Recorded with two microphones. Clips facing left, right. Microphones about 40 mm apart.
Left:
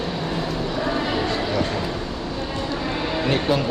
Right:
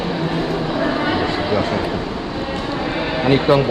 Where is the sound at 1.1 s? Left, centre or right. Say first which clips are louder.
Right 4 dB; right.